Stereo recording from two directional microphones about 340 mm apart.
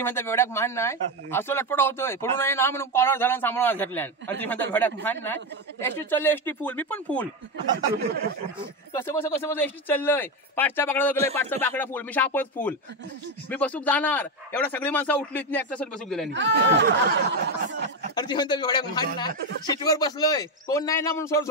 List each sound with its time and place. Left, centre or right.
0.0 s speech: centre
7.7 s speech: right
8.9 s speech: centre
16.3 s speech: right
18.1 s speech: centre